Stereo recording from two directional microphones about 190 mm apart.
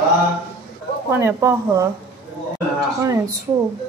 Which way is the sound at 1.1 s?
15° right (ahead or behind).